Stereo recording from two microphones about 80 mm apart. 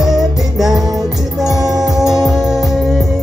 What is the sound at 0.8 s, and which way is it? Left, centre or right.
Music, right.